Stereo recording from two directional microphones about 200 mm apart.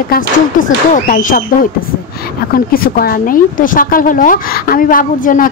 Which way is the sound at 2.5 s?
45° left (ahead or behind).